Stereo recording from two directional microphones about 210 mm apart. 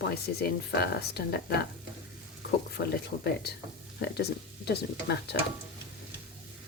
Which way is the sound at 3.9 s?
50° left (ahead or behind).